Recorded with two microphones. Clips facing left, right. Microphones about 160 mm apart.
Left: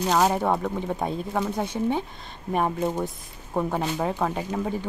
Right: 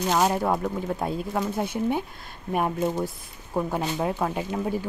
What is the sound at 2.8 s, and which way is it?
Speech, 15° left (ahead or behind).